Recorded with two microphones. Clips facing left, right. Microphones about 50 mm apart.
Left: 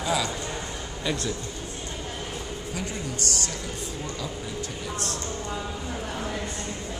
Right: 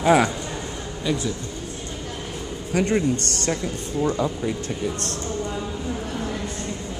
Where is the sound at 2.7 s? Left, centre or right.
Right.